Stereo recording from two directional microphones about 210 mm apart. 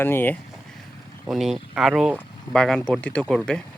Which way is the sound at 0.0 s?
10° left (ahead or behind).